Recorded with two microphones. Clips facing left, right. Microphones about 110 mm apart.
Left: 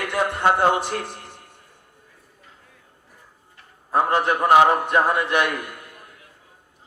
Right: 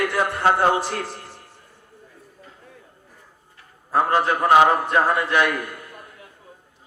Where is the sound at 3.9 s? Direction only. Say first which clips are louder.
Even; 20° left (ahead or behind).